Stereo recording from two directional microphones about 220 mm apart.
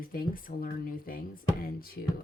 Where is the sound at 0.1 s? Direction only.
40° left (ahead or behind).